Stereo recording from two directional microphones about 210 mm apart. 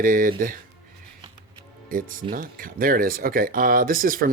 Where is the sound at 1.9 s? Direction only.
40° right (ahead or behind).